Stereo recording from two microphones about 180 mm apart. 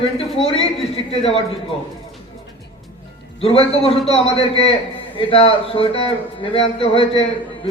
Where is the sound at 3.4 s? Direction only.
30° left (ahead or behind).